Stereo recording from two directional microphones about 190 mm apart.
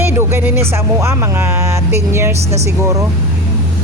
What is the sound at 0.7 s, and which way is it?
Speech, 15° right (ahead or behind).